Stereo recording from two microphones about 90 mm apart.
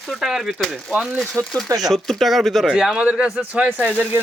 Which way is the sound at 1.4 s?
35° right (ahead or behind).